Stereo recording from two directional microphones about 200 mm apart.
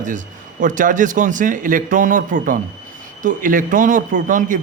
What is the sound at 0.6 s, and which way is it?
A man's voice, 40° right (ahead or behind).